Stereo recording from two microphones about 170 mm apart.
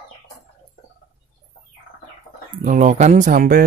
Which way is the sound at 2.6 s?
50° right (ahead or behind).